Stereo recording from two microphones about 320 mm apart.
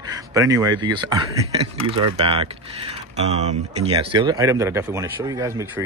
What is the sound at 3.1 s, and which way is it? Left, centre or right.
Speech, centre.